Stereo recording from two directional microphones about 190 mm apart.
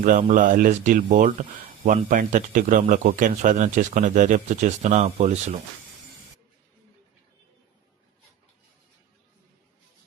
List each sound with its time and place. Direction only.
0.0 s speech: 45° right (ahead or behind)